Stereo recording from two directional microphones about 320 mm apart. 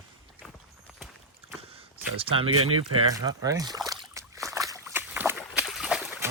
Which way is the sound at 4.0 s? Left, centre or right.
Centre.